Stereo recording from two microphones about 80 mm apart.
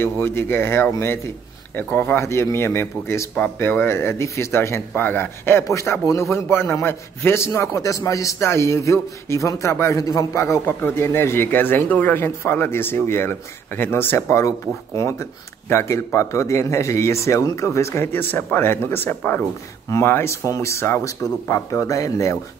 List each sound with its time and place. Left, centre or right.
0.0 s speech: left
1.8 s speech: left
2.1 s speech: left
10.6 s speech: left
18.1 s speech: left
20.4 s speech: left